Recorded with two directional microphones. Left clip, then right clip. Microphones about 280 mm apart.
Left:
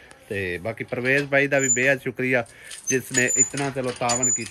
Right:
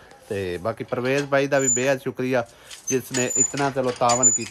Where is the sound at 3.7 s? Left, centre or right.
Right.